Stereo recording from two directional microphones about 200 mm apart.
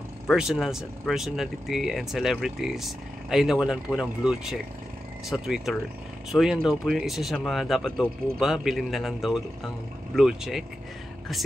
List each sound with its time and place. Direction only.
0.3 s speech: centre (ahead or behind)